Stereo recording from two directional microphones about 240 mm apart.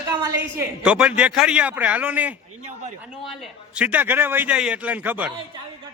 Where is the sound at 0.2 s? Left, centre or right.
Centre.